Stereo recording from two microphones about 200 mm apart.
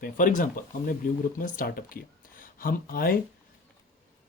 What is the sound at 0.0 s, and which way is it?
Speech, 40° left (ahead or behind).